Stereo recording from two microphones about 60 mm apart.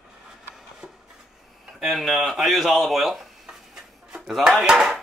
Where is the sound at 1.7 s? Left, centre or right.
Centre.